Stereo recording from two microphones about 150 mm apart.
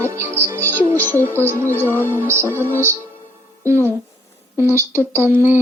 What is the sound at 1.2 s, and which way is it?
Speech, 15° left (ahead or behind).